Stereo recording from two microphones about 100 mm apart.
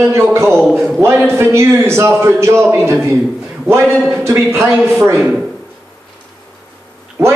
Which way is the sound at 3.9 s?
5° left (ahead or behind).